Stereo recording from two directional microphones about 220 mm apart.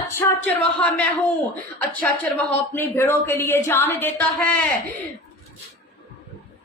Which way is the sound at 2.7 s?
10° left (ahead or behind).